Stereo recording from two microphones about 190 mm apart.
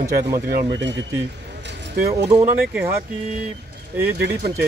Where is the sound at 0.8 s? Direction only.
70° right (ahead or behind).